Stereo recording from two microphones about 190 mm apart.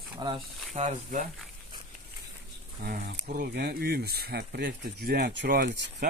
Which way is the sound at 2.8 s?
45° right (ahead or behind).